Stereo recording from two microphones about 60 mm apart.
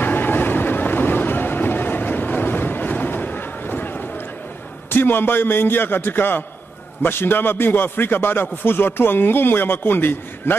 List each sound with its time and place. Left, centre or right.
0.0 s vehicle: left
4.8 s speech: left